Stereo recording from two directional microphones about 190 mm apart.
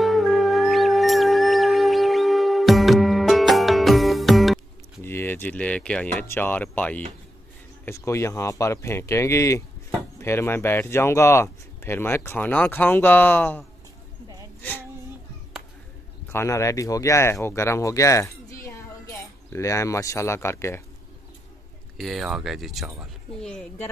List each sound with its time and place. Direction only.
0.0 s music: centre (ahead or behind)
5.0 s speech: 10° left (ahead or behind)
14.6 s a sound: 10° left (ahead or behind)
16.3 s speech: 15° left (ahead or behind)
21.9 s speech: centre (ahead or behind)